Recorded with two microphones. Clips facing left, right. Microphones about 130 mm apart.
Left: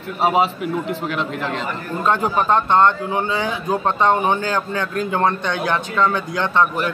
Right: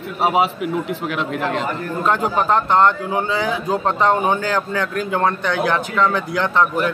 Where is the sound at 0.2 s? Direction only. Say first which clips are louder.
Even; 10° right (ahead or behind).